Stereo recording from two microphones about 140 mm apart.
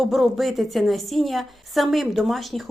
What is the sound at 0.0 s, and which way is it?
A woman's voice, centre (ahead or behind).